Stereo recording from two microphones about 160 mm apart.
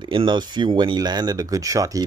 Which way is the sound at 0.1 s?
30° right (ahead or behind).